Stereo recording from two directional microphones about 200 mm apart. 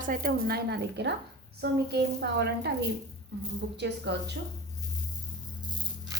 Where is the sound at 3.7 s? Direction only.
55° right (ahead or behind).